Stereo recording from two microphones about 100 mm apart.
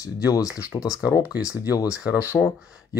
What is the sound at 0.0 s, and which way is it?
Speech, 35° left (ahead or behind).